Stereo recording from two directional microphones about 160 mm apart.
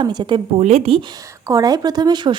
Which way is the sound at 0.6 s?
40° right (ahead or behind).